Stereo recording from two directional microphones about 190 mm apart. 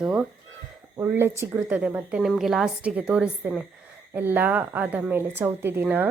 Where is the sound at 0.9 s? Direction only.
15° right (ahead or behind).